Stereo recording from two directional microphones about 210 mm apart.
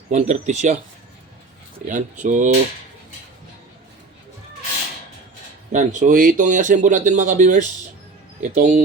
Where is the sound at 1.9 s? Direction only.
35° right (ahead or behind).